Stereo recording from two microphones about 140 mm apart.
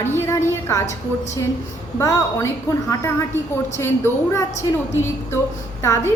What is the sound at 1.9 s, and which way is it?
A woman's voice, 20° left (ahead or behind).